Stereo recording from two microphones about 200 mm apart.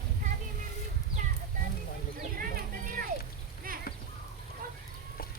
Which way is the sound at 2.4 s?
45° right (ahead or behind).